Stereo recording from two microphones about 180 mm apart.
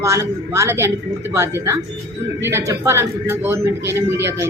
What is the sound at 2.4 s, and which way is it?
A woman's voice, 15° right (ahead or behind).